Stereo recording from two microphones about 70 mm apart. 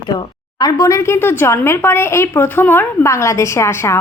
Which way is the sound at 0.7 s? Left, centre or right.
Left.